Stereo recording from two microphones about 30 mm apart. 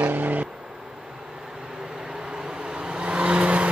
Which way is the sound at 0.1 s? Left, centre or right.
Right.